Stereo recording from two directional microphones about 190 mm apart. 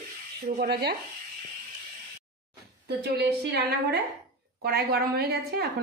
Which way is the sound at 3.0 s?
60° right (ahead or behind).